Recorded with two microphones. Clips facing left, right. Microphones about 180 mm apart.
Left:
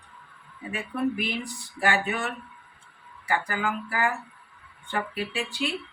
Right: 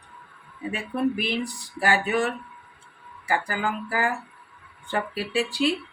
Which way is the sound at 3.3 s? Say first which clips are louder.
Right 1 dB; 30° right (ahead or behind).